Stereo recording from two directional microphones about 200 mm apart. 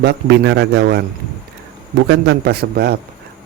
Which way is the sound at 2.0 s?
60° right (ahead or behind).